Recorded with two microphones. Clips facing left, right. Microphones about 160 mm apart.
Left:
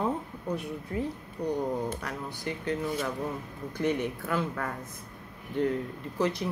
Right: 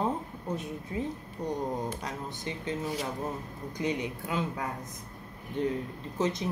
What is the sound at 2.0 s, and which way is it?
Speech, 20° right (ahead or behind).